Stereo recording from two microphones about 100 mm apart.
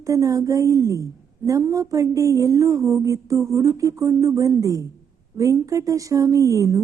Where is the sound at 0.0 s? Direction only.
35° right (ahead or behind).